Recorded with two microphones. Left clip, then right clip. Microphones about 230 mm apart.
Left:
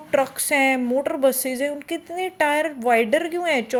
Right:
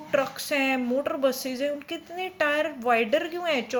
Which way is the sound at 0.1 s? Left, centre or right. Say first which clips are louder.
Left 5 dB; left.